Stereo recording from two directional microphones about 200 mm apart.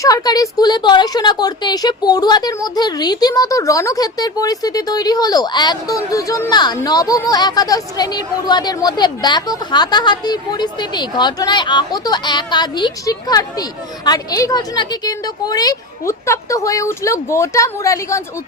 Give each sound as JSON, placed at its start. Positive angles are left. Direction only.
{"t": 0.0, "sound": "a woman's voice", "side_deg": 20}